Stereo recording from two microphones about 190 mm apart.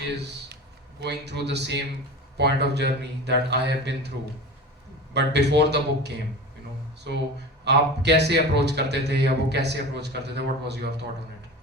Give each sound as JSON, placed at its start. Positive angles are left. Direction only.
{"t": 1.0, "sound": "a man's voice", "side_deg": -60}
{"t": 5.1, "sound": "a man's voice", "side_deg": -65}
{"t": 7.6, "sound": "a man's voice", "side_deg": -65}